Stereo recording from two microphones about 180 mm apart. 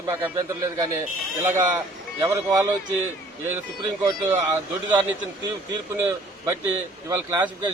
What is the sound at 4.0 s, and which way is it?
Speech, 15° right (ahead or behind).